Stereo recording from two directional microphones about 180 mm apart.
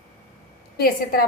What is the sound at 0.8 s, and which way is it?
Speech, 55° left (ahead or behind).